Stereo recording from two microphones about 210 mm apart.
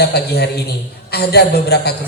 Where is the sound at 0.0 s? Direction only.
50° left (ahead or behind).